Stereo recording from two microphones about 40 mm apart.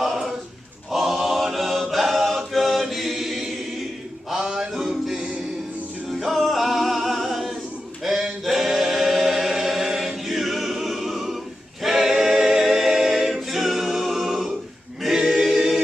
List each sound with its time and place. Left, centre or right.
0.0 s choir: centre
0.9 s chant: centre
4.3 s music: centre
5.1 s music: right
6.0 s music: centre
8.0 s choir: centre
11.8 s a capella: centre
15.1 s choir: centre